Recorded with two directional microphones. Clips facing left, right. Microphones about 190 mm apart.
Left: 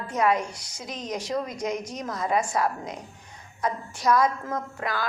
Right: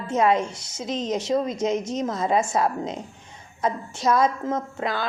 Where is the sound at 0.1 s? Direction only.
25° right (ahead or behind).